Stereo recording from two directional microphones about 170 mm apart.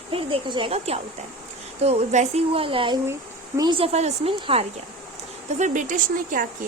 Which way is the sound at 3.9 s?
35° right (ahead or behind).